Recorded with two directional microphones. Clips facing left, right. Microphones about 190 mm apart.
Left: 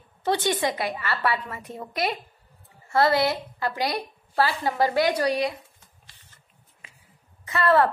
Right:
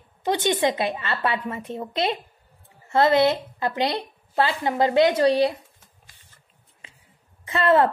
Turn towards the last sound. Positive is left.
turn(degrees=-20)  # may be behind; listen again after turning